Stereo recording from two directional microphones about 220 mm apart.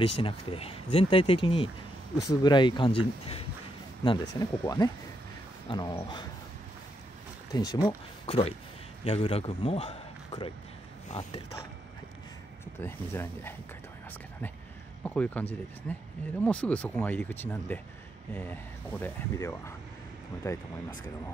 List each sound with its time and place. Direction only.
0.0 s speech: 25° left (ahead or behind)
7.5 s a man's voice: 20° left (ahead or behind)
12.8 s speech: 10° left (ahead or behind)
15.0 s speech: 5° left (ahead or behind)